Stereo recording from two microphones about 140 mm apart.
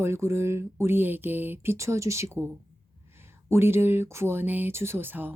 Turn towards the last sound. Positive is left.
turn(degrees=-15)  # may be behind; listen again after turning